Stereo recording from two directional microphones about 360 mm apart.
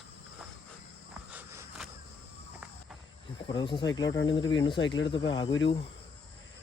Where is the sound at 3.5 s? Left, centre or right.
Centre.